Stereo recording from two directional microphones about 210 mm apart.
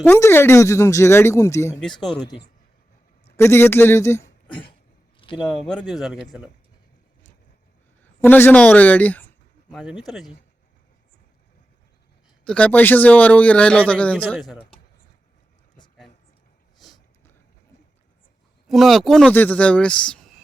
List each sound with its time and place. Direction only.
0.0 s a man's voice: 10° left (ahead or behind)
3.3 s a man's voice: 10° left (ahead or behind)
5.2 s a sound: 25° left (ahead or behind)
5.9 s a man's voice: centre (ahead or behind)
8.2 s a man's voice: 10° left (ahead or behind)
9.7 s a man's voice: 5° right (ahead or behind)
12.5 s a man's voice: 5° left (ahead or behind)
16.8 s a sound: 20° left (ahead or behind)
18.7 s a man's voice: centre (ahead or behind)